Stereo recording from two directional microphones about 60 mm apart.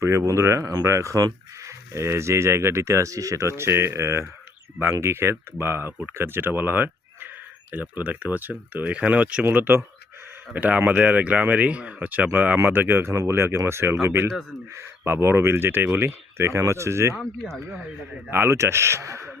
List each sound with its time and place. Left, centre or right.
0.0 s speech: right
1.9 s speech: right
3.6 s speech: right
18.3 s speech: right